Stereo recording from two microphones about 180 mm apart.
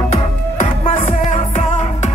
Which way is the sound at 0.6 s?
35° left (ahead or behind).